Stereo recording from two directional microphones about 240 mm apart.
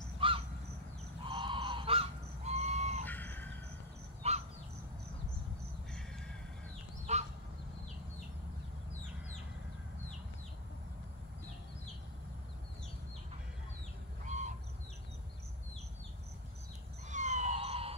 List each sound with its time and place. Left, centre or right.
0.2 s bird: right
1.2 s honk: right
3.1 s a sound: centre
4.2 s bird: right
7.1 s a sound: right
14.2 s crow: right
17.1 s emergency vehicle: right